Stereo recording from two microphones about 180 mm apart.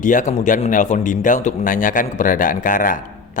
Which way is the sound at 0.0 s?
45° left (ahead or behind).